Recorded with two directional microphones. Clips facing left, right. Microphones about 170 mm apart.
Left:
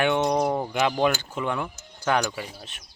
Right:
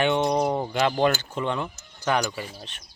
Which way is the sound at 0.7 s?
10° left (ahead or behind).